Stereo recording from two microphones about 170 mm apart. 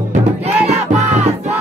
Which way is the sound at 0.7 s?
40° right (ahead or behind).